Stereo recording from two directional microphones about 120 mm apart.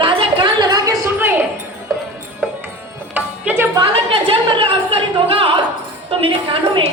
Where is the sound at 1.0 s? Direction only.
20° right (ahead or behind).